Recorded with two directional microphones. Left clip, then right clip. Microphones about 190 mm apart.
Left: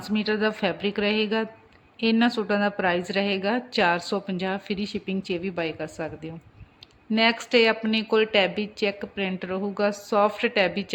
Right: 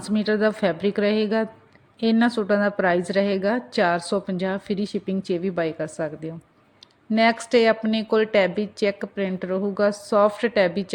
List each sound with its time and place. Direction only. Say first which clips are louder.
0.0 s a woman's voice: right 3 dB; 20° right (ahead or behind)